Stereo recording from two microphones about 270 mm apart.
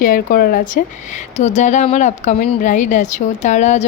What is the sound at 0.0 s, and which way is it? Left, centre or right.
Speech, left.